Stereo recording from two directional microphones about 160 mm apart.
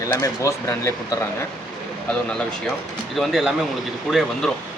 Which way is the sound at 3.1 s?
Centre (ahead or behind).